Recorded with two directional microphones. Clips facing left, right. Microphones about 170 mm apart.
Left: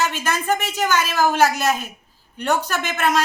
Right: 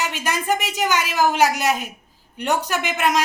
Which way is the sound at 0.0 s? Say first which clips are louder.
Left 2 dB; 15° right (ahead or behind).